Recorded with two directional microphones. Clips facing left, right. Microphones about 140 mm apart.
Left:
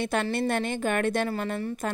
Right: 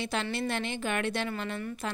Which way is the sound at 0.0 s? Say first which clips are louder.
Left 5 dB; 50° left (ahead or behind).